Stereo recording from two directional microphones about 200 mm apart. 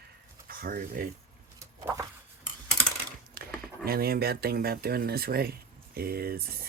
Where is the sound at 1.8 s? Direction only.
15° right (ahead or behind).